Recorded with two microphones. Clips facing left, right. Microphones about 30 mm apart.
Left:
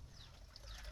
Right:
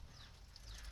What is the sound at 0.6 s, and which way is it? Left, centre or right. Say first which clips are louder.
Pour: left 2 dB; centre.